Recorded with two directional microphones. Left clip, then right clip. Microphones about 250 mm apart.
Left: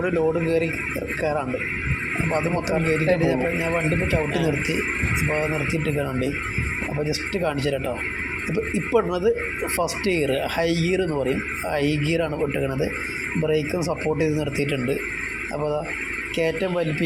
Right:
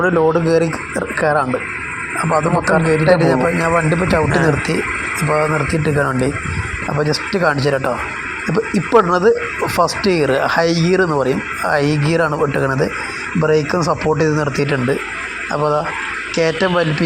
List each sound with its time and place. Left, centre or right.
0.0 s speech: right
16.4 s speech: centre